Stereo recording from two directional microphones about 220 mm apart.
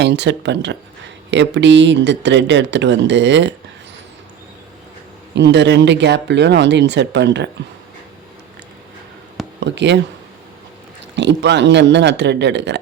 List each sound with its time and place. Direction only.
0.0 s speech: 50° right (ahead or behind)
5.3 s speech: 50° right (ahead or behind)
9.6 s speech: 50° right (ahead or behind)
11.2 s speech: 50° right (ahead or behind)